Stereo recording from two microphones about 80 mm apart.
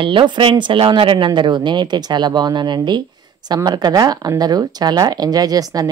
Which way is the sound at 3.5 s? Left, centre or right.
Right.